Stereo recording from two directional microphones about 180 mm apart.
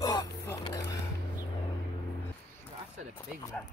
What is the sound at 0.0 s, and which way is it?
Vehicle, 20° left (ahead or behind).